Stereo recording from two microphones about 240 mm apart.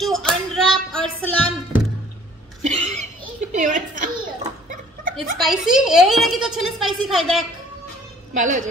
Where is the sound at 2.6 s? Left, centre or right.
Right.